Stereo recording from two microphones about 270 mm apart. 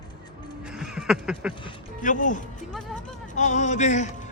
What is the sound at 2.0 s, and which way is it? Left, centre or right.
A man's voice, left.